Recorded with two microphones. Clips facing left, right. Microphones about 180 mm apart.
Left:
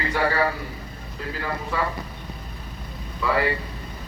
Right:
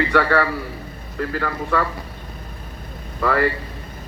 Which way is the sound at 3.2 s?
55° right (ahead or behind).